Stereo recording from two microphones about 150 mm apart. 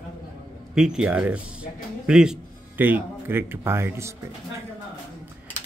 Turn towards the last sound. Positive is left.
turn(degrees=-15)  # may be behind; listen again after turning